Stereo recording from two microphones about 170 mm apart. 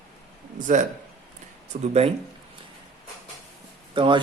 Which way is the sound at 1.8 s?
40° right (ahead or behind).